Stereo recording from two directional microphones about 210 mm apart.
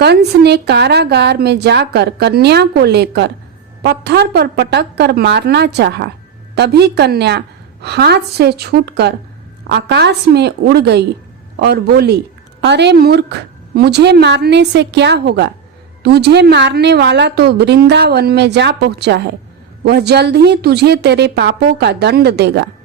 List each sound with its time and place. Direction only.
0.0 s a woman's voice: 50° right (ahead or behind)